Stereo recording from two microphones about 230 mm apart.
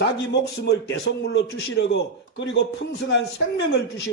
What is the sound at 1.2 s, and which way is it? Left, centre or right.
A man's voice, left.